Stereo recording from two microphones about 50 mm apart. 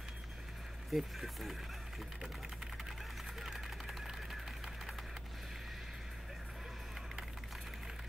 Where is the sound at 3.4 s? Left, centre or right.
Centre.